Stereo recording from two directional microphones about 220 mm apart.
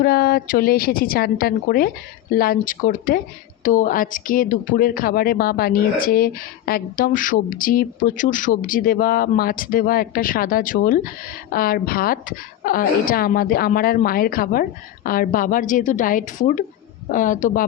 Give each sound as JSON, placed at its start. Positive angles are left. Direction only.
{"t": 0.0, "sound": "a woman's voice", "side_deg": 45}